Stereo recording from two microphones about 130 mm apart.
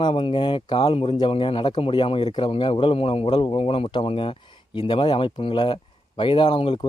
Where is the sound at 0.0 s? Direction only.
40° left (ahead or behind).